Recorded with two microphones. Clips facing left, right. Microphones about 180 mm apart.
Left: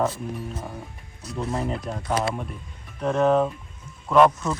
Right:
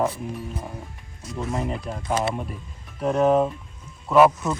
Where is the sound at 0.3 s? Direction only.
Centre (ahead or behind).